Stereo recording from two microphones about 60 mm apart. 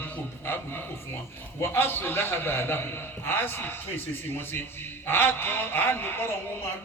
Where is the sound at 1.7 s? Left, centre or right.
Left.